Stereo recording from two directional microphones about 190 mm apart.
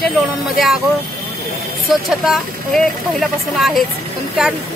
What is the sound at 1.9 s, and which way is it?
Speech, centre (ahead or behind).